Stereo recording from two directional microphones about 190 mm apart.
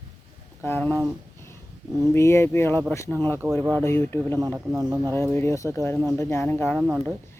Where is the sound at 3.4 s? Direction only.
5° right (ahead or behind).